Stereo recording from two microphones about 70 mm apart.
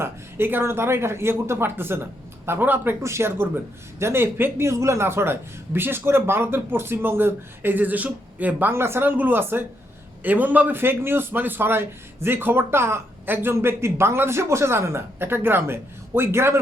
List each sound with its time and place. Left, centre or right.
0.0 s a man's voice: right
3.0 s a man's voice: right
8.7 s a man's voice: right